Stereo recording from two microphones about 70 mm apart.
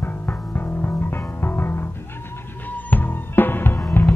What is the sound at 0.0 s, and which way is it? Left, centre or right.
Music, left.